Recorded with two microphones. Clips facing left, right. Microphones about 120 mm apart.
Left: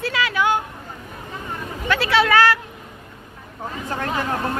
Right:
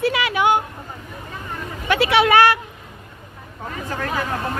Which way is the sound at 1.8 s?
20° right (ahead or behind).